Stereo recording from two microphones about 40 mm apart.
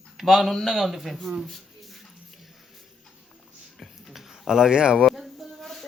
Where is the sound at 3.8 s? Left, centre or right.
Centre.